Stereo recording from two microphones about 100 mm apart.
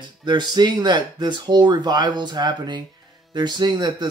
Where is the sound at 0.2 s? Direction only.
45° right (ahead or behind).